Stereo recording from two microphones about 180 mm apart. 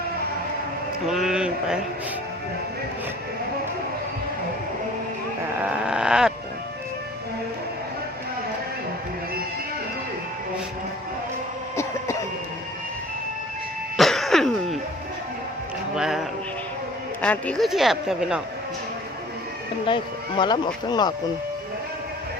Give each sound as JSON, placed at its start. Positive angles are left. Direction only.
{"t": 1.0, "sound": "speech", "side_deg": 0}
{"t": 5.6, "sound": "a sound", "side_deg": -5}
{"t": 13.9, "sound": "throat clearing", "side_deg": 0}
{"t": 16.0, "sound": "speech", "side_deg": -5}
{"t": 17.2, "sound": "speech", "side_deg": 10}
{"t": 19.8, "sound": "speech", "side_deg": 25}